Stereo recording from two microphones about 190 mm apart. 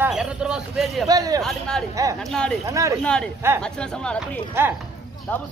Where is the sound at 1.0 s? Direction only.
20° right (ahead or behind).